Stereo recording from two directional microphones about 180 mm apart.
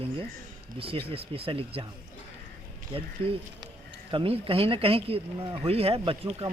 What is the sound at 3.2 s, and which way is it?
Speech, 30° right (ahead or behind).